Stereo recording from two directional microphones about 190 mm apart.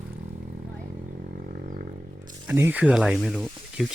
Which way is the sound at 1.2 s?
50° right (ahead or behind).